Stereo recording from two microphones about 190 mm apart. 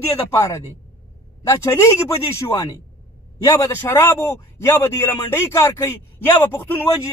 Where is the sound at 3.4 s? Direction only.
15° left (ahead or behind).